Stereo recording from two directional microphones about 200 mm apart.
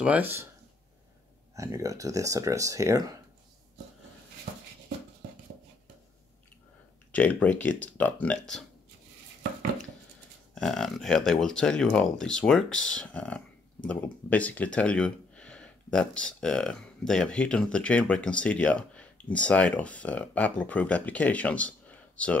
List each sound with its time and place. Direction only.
0.0 s speech: 10° right (ahead or behind)
1.5 s speech: 15° right (ahead or behind)
7.1 s speech: 10° left (ahead or behind)
10.5 s speech: centre (ahead or behind)